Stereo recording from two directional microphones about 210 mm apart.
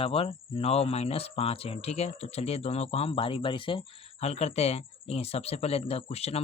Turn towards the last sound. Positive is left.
turn(degrees=30)  # may be behind; listen again after turning